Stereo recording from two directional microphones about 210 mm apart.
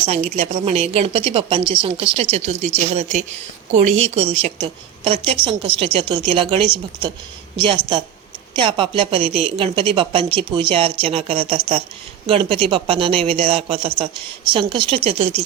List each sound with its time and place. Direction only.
0.3 s a woman's voice: 30° right (ahead or behind)